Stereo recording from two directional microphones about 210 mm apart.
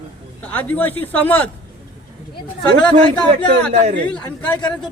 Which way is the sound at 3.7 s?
30° right (ahead or behind).